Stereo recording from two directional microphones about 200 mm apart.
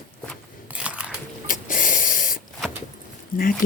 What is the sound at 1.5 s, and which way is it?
Spray, 40° left (ahead or behind).